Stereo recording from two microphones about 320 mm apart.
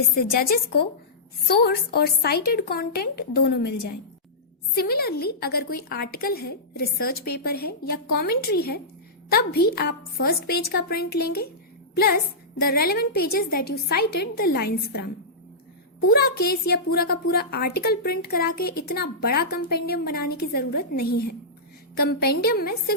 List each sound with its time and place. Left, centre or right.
0.3 s a woman's voice: left
16.0 s a woman's voice: left